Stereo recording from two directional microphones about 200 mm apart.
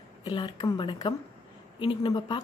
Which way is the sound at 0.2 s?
20° left (ahead or behind).